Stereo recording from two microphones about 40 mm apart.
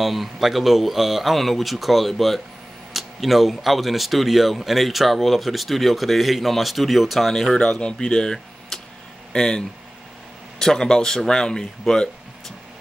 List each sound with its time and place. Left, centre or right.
0.0 s speech: centre
7.8 s speech: centre